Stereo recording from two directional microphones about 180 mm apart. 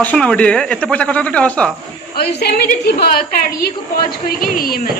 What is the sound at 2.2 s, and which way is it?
A woman's voice, 60° left (ahead or behind).